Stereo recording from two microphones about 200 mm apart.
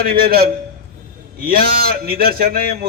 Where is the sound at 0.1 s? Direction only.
50° right (ahead or behind).